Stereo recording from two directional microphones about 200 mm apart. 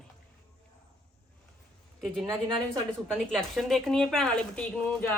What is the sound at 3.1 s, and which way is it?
Speech, centre (ahead or behind).